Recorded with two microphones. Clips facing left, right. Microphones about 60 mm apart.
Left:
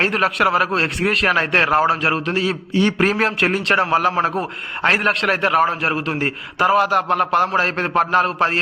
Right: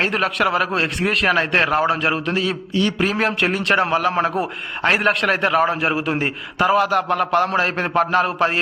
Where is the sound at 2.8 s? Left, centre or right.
Left.